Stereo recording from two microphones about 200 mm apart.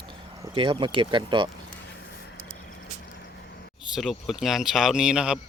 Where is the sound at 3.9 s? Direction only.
Centre (ahead or behind).